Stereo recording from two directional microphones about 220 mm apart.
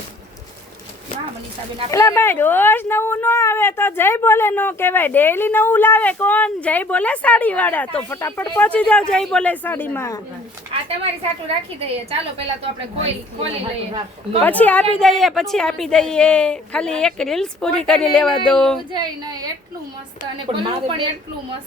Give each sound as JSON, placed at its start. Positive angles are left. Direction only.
{"t": 1.9, "sound": "speech", "side_deg": 15}
{"t": 10.7, "sound": "a woman's voice", "side_deg": -25}
{"t": 13.0, "sound": "a woman's voice", "side_deg": -25}
{"t": 14.4, "sound": "a woman's voice", "side_deg": 5}
{"t": 18.9, "sound": "a woman's voice", "side_deg": -20}
{"t": 20.5, "sound": "a woman's voice", "side_deg": -25}